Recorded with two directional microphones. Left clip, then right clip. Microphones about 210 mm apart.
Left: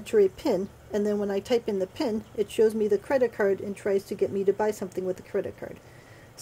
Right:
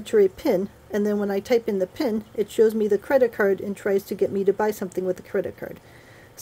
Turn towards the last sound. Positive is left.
turn(degrees=-15)  # may be behind; listen again after turning